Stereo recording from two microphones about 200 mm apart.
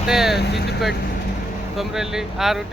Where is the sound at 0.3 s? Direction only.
55° left (ahead or behind).